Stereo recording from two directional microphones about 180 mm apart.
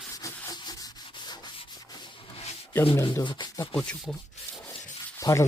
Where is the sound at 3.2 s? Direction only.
25° left (ahead or behind).